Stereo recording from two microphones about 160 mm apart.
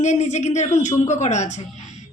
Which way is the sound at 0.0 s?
45° left (ahead or behind).